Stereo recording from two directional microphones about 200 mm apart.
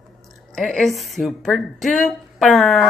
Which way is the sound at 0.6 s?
5° left (ahead or behind).